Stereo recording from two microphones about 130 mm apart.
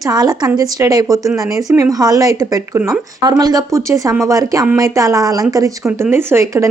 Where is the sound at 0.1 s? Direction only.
30° right (ahead or behind).